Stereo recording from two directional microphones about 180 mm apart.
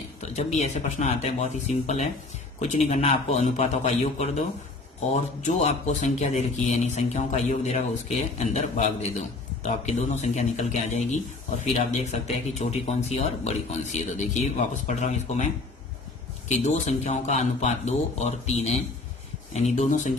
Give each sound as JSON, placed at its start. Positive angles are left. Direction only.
{"t": 0.2, "sound": "speech", "side_deg": 40}
{"t": 16.5, "sound": "speech", "side_deg": 40}